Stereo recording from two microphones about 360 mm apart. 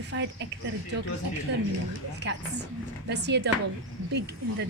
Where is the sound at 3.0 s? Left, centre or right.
Right.